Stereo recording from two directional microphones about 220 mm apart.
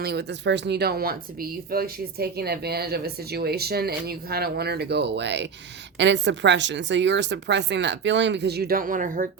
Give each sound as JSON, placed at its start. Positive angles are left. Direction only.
{"t": 0.0, "sound": "speech", "side_deg": -50}